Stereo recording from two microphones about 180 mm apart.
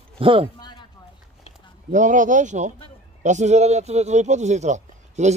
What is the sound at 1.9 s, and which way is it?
Speech, 45° right (ahead or behind).